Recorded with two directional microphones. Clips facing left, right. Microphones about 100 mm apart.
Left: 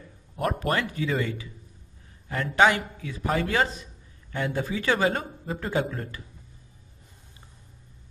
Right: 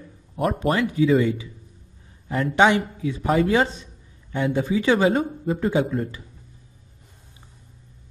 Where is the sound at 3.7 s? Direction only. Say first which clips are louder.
Even; 25° right (ahead or behind).